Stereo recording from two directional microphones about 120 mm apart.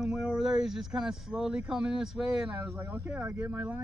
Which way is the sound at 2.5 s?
20° right (ahead or behind).